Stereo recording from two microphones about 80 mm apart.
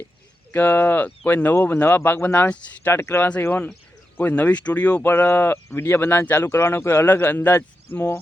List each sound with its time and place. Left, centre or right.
0.5 s speech: left
2.9 s speech: left